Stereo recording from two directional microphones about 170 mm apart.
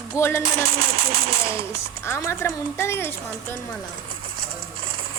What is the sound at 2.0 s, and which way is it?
A woman's voice, 15° left (ahead or behind).